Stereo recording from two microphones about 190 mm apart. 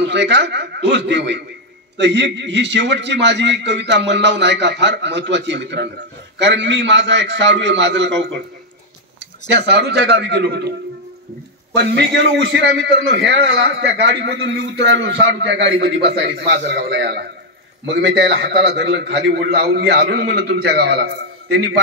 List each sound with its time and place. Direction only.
0.0 s a man's voice: 65° right (ahead or behind)
9.5 s a man's voice: 60° right (ahead or behind)
11.7 s a man's voice: 65° right (ahead or behind)